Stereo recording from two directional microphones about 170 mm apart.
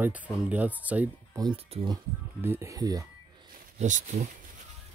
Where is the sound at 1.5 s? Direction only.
35° right (ahead or behind).